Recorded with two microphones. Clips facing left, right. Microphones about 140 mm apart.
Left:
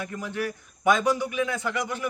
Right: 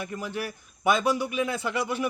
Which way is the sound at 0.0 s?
20° right (ahead or behind).